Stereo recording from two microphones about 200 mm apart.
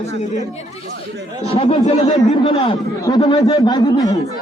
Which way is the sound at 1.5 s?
25° left (ahead or behind).